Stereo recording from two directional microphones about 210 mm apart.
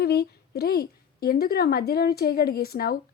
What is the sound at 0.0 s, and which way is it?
Speech, 50° left (ahead or behind).